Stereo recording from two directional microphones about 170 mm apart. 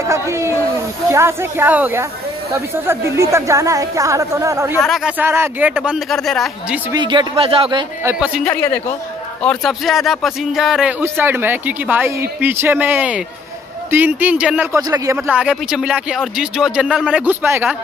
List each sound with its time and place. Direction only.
0.0 s a sound: 15° right (ahead or behind)
1.1 s speech: 15° right (ahead or behind)
4.8 s speech: 5° right (ahead or behind)
6.9 s speech: 25° right (ahead or behind)
8.0 s speech: 10° right (ahead or behind)
9.4 s speech: 5° left (ahead or behind)
14.8 s speech: 20° right (ahead or behind)
15.2 s speech: 5° right (ahead or behind)